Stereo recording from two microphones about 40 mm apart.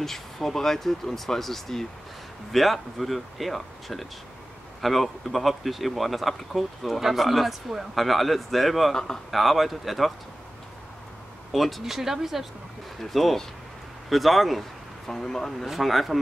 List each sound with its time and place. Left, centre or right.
0.0 s speech: centre
8.9 s speech: centre
9.3 s speech: centre
11.5 s speech: centre
13.0 s speech: centre
15.0 s speech: centre
15.7 s speech: centre